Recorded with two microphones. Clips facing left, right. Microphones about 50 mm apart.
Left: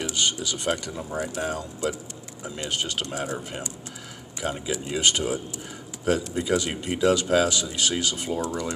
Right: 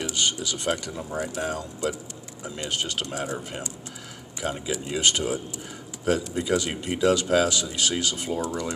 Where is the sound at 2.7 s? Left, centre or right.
Centre.